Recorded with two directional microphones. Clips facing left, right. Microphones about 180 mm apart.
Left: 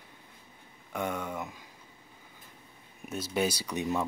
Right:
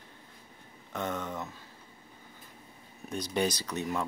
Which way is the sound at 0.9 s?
10° left (ahead or behind).